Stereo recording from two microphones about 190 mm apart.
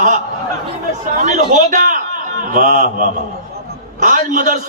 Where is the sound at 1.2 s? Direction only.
40° right (ahead or behind).